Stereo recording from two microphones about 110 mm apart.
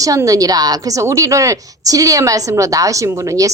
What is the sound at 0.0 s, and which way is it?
A woman's voice, 30° right (ahead or behind).